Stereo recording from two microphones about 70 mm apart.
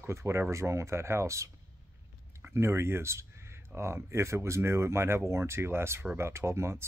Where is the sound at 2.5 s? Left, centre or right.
Right.